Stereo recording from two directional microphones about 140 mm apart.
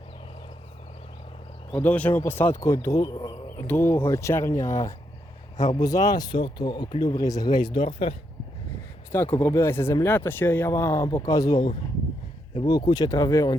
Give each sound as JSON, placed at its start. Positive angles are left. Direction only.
{"t": 1.7, "sound": "speech", "side_deg": 10}
{"t": 3.7, "sound": "speech", "side_deg": 15}
{"t": 9.1, "sound": "speech", "side_deg": 15}
{"t": 12.6, "sound": "speech", "side_deg": 25}